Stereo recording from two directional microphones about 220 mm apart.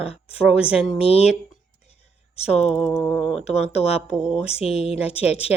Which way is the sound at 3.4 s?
30° left (ahead or behind).